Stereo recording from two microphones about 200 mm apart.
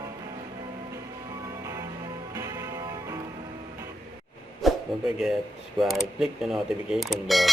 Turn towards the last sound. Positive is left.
turn(degrees=0)  # may be behind; listen again after turning